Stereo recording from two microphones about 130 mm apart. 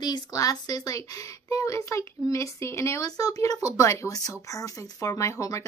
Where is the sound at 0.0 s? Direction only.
30° left (ahead or behind).